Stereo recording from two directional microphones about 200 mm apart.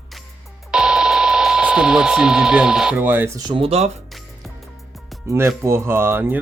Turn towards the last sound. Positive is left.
turn(degrees=-10)  # may be behind; listen again after turning